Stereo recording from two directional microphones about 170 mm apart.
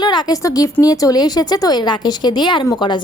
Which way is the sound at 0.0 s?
25° left (ahead or behind).